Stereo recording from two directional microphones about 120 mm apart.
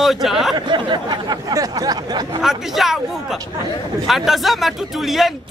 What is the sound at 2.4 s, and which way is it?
Speech, 5° right (ahead or behind).